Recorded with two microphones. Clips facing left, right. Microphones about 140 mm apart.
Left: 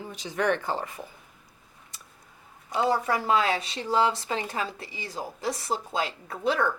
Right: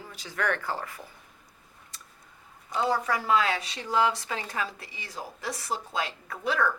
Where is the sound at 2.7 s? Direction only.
25° left (ahead or behind).